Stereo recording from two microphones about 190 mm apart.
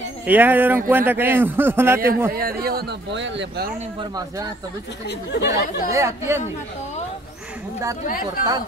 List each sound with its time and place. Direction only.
0.3 s a man's voice: 10° right (ahead or behind)
2.3 s a man's voice: 50° right (ahead or behind)
4.0 s speech: 20° right (ahead or behind)
5.0 s speech: 60° left (ahead or behind)
5.9 s a man's voice: 15° right (ahead or behind)
8.0 s speech: 45° left (ahead or behind)